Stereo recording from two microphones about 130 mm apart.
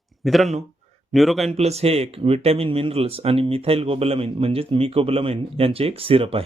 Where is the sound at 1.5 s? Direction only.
55° right (ahead or behind).